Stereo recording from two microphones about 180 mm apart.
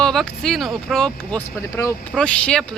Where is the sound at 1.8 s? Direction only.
15° left (ahead or behind).